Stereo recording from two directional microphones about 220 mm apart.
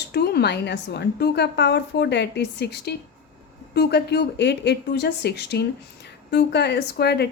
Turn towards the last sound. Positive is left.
turn(degrees=50)  # may be behind; listen again after turning